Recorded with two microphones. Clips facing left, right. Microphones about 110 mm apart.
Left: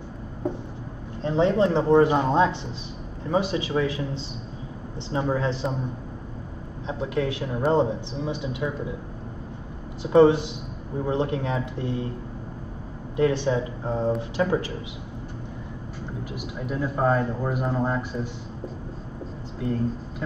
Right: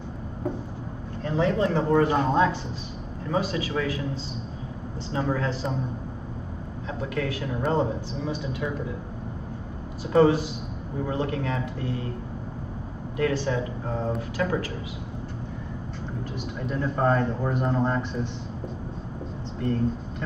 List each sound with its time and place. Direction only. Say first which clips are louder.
1.2 s speech: left 3 dB; 25° left (ahead or behind)
5.1 s speech: left 2 dB; 20° left (ahead or behind)
6.9 s speech: left 3 dB; 20° left (ahead or behind)
10.1 s speech: left 3 dB; 20° left (ahead or behind)
13.2 s speech: left 3 dB; 20° left (ahead or behind)
16.5 s speech: even; 5° left (ahead or behind)
19.6 s speech: right 1 dB; 5° left (ahead or behind)